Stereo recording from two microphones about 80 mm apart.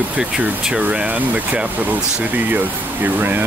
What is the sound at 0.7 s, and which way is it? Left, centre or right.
Speech, centre.